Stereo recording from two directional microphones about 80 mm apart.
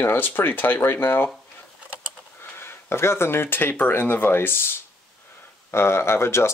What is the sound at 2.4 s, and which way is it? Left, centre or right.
Speech, left.